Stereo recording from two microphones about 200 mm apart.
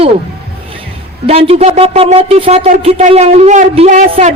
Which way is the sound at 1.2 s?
30° right (ahead or behind).